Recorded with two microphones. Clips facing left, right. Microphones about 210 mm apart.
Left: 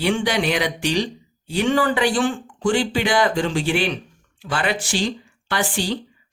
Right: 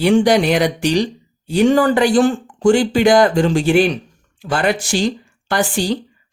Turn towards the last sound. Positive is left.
turn(degrees=-45)  # may be behind; listen again after turning